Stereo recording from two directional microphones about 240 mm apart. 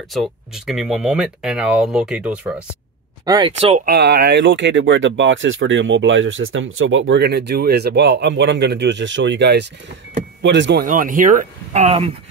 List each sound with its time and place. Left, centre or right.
0.1 s speech: centre
3.3 s speech: centre
3.8 s speech: right